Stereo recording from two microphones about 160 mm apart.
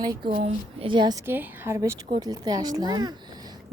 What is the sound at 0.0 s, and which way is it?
Speech, 30° right (ahead or behind).